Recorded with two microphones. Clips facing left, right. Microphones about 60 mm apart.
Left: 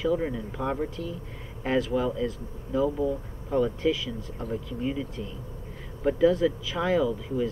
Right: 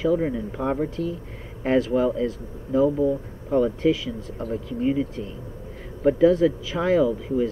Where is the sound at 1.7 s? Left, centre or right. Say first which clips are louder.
Right 5 dB; right.